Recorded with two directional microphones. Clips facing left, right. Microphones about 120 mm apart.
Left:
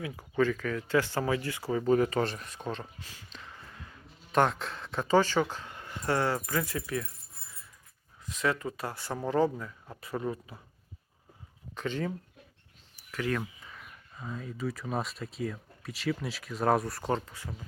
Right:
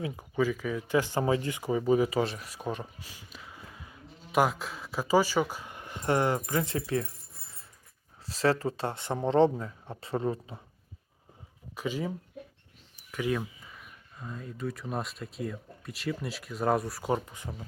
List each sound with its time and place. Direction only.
0.3 s speech: 10° right (ahead or behind); by 7.1 s 30° right (ahead or behind)
8.2 s speech: 35° right (ahead or behind)
11.7 s speech: 10° right (ahead or behind)
13.7 s speech: centre (ahead or behind)
17.1 s speech: 15° right (ahead or behind)